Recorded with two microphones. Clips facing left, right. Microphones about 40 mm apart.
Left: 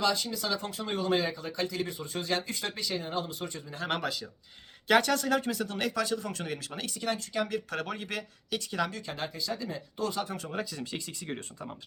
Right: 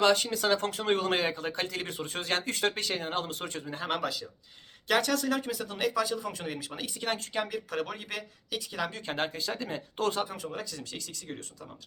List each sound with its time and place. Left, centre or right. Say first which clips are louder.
0.0 s speech: right 5 dB; right
3.8 s speech: left 1 dB; centre
7.0 s speech: left 1 dB; right
7.4 s speech: even; centre
8.9 s speech: right 2 dB; right
9.1 s speech: right 3 dB; right
10.2 s speech: even; centre
10.5 s speech: left 3 dB; centre; by 11.7 s left